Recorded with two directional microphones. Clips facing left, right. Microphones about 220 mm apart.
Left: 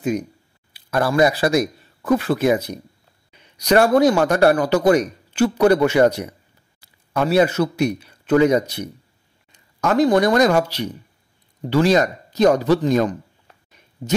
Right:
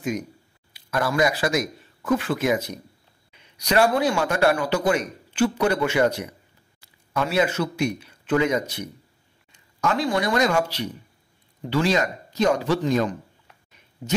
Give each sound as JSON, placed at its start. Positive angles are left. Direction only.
{"t": 0.7, "sound": "speech", "side_deg": 35}
{"t": 3.6, "sound": "a man's voice", "side_deg": 45}
{"t": 11.7, "sound": "a man's voice", "side_deg": 40}